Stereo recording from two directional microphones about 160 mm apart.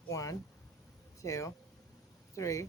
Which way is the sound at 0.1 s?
20° left (ahead or behind).